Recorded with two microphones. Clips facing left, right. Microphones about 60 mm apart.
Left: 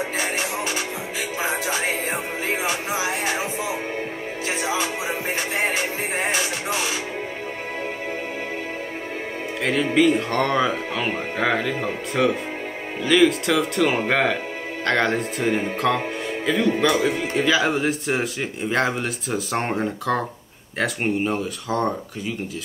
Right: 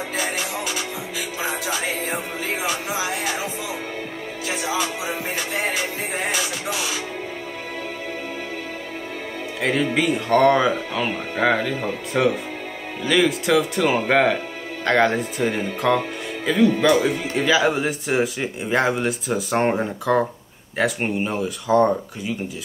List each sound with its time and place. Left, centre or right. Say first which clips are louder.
0.2 s music: left 1 dB; left
4.5 s music: even; left
9.6 s speech: left 2 dB; centre